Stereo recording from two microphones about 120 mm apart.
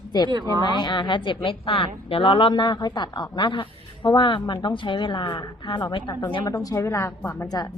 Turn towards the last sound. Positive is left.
turn(degrees=35)  # may be behind; listen again after turning